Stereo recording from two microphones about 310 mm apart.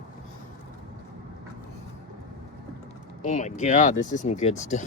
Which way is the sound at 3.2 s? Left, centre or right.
Left.